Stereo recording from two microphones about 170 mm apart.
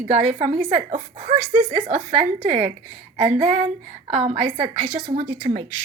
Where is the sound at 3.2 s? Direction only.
45° right (ahead or behind).